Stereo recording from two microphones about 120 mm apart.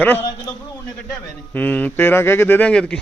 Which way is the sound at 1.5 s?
15° left (ahead or behind).